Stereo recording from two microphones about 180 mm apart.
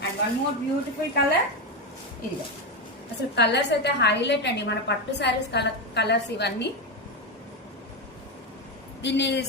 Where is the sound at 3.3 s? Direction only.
70° left (ahead or behind).